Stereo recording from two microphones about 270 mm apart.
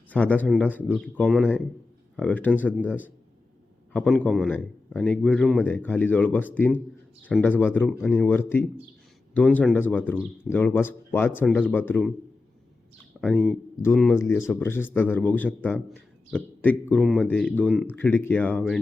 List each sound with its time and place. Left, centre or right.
0.1 s a man's voice: centre
13.2 s a man's voice: centre